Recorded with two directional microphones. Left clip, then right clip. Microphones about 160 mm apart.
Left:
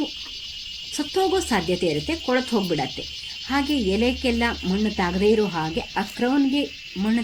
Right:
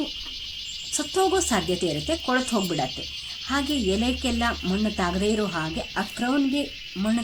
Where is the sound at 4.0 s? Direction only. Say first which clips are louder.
Left 3 dB; 10° left (ahead or behind).